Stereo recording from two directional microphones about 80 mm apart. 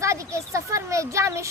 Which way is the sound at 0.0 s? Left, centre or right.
Right.